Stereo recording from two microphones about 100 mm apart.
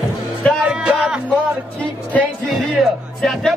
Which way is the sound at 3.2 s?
Centre (ahead or behind).